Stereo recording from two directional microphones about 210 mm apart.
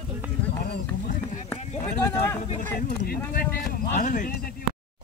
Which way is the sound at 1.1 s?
35° left (ahead or behind).